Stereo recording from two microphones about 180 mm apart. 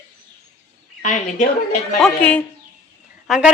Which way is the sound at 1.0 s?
45° left (ahead or behind).